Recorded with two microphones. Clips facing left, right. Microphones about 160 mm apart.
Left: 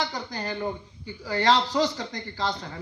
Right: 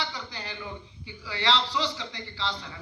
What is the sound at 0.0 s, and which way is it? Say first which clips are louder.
Speech: left 6 dB; 45° left (ahead or behind).